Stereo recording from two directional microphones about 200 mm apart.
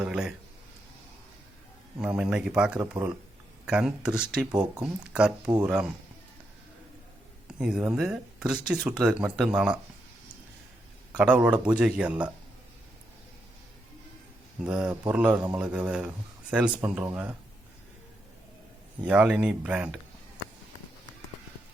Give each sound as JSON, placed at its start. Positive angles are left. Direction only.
{"t": 0.0, "sound": "speech", "side_deg": -5}
{"t": 2.0, "sound": "speech", "side_deg": -5}
{"t": 4.5, "sound": "speech", "side_deg": -20}
{"t": 4.8, "sound": "speech", "side_deg": -5}
{"t": 7.4, "sound": "speech", "side_deg": -5}
{"t": 11.1, "sound": "speech", "side_deg": -5}
{"t": 14.6, "sound": "speech", "side_deg": -5}
{"t": 19.0, "sound": "speech", "side_deg": -5}